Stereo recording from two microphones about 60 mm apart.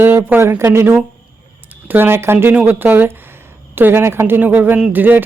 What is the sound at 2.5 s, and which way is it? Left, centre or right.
Speech, right.